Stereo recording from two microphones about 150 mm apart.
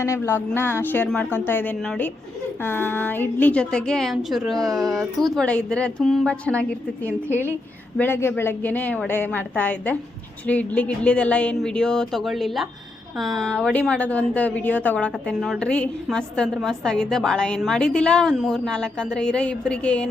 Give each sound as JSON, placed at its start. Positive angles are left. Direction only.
{"t": 0.0, "sound": "a woman's voice", "side_deg": 20}
{"t": 4.5, "sound": "speech", "side_deg": -25}
{"t": 5.3, "sound": "a woman's voice", "side_deg": 5}